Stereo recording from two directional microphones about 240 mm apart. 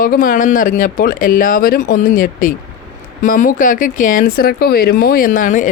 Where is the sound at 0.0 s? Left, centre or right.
Left.